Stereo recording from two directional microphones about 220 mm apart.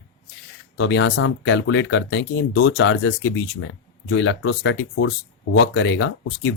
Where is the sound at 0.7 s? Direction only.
55° left (ahead or behind).